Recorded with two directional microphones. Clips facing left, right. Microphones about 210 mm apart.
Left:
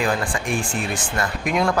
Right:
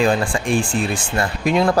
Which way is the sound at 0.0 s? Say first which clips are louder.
Right 5 dB; 25° right (ahead or behind).